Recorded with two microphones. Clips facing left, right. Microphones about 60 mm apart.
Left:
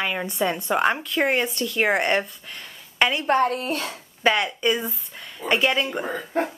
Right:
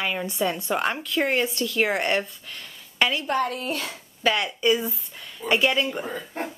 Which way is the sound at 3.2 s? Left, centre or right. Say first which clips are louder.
Left 4 dB; left.